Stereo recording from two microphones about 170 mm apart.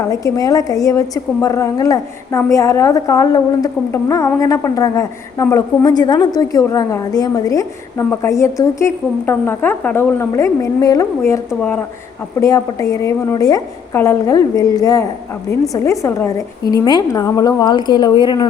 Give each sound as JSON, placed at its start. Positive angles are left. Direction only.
{"t": 0.0, "sound": "a woman's voice", "side_deg": 20}